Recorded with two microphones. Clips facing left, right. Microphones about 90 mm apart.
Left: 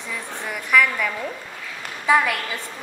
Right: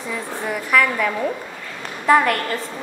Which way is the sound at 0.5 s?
Centre (ahead or behind).